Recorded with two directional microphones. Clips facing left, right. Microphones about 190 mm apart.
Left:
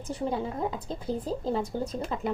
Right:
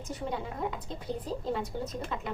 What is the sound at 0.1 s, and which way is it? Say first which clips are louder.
Speech: left 6 dB; 30° left (ahead or behind).